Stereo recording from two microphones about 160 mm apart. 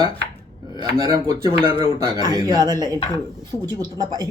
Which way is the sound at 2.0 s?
25° right (ahead or behind).